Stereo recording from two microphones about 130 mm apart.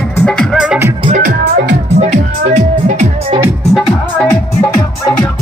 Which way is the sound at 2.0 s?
60° right (ahead or behind).